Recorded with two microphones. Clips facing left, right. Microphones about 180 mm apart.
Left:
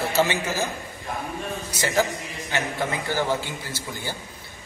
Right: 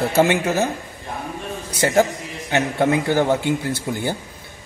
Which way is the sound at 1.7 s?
55° right (ahead or behind).